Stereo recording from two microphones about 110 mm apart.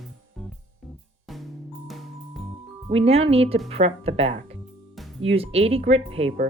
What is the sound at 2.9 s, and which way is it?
Speech, 65° right (ahead or behind).